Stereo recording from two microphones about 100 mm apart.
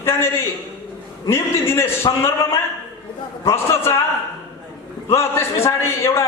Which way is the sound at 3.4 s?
25° left (ahead or behind).